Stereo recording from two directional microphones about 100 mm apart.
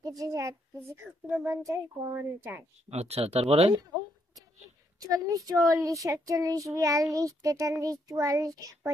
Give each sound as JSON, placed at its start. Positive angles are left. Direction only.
{"t": 0.0, "sound": "speech", "side_deg": -35}
{"t": 2.9, "sound": "speech", "side_deg": -90}
{"t": 4.9, "sound": "speech", "side_deg": -35}